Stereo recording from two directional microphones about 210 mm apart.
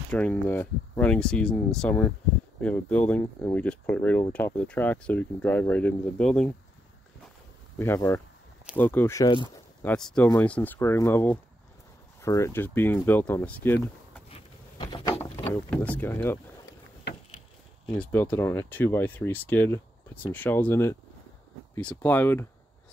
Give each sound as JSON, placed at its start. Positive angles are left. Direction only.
{"t": 0.1, "sound": "speech", "side_deg": 5}
{"t": 7.8, "sound": "speech", "side_deg": 10}
{"t": 9.8, "sound": "speech", "side_deg": 5}
{"t": 14.3, "sound": "a sound", "side_deg": 25}
{"t": 15.3, "sound": "speech", "side_deg": 10}
{"t": 17.8, "sound": "speech", "side_deg": 5}